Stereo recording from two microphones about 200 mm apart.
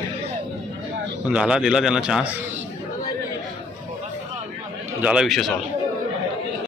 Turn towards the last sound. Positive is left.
turn(degrees=0)  # may be behind; listen again after turning